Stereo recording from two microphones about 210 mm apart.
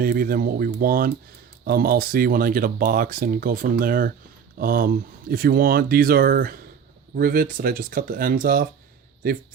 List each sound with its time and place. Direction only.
0.0 s speech: 45° right (ahead or behind)